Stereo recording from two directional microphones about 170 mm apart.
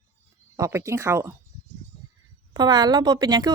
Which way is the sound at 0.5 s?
15° right (ahead or behind).